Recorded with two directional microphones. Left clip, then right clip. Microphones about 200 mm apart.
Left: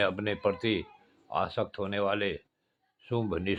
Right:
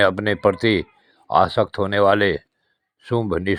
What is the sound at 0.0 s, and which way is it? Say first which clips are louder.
Speech: right 11 dB; 35° right (ahead or behind).